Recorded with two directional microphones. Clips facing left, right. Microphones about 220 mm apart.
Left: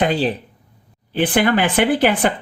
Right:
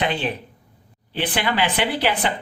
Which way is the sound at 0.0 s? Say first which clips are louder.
Left 6 dB; 40° left (ahead or behind).